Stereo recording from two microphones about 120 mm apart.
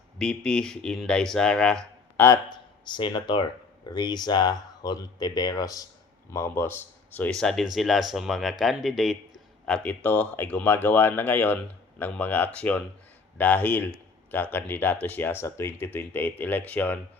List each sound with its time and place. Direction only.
0.2 s speech: 5° left (ahead or behind)
2.1 s speech: 20° left (ahead or behind)
2.8 s a man's voice: 40° left (ahead or behind); by 17.0 s 15° left (ahead or behind)